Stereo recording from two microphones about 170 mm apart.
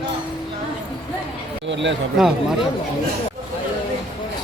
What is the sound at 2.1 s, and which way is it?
Speech, 5° right (ahead or behind).